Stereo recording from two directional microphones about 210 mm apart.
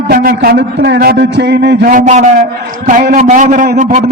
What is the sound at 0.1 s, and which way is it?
A man's voice, 45° right (ahead or behind).